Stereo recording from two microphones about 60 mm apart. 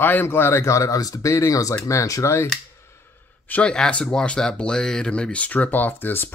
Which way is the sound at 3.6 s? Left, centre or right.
Centre.